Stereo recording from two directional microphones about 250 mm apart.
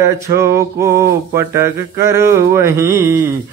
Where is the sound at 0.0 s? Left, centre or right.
Centre.